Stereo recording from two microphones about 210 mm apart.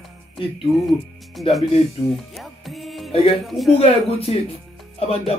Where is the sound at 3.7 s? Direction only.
30° left (ahead or behind).